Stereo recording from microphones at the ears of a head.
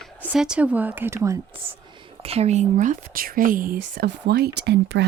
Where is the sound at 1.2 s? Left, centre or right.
Right.